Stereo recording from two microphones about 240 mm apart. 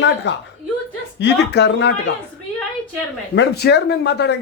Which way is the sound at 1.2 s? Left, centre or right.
Left.